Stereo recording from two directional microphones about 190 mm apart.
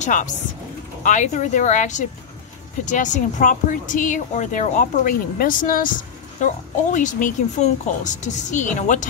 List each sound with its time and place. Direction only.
0.0 s speech: 40° left (ahead or behind)